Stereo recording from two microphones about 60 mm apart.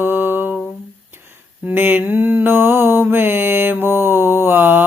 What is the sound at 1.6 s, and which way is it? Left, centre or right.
Mantra, right.